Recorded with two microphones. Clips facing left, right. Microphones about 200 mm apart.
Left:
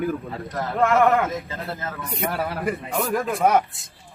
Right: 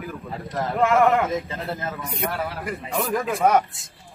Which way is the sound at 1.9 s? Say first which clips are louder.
Left 1 dB; centre (ahead or behind).